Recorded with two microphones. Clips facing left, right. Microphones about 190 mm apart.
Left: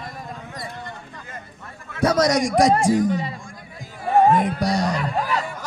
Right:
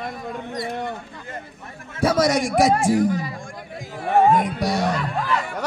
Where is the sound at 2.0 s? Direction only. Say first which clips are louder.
Left 1 dB; 10° right (ahead or behind).